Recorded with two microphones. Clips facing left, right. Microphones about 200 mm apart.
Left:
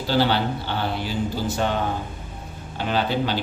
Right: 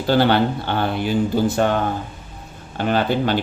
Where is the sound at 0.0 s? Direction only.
55° right (ahead or behind).